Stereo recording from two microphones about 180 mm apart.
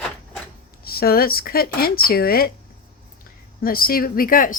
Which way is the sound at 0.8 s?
55° left (ahead or behind).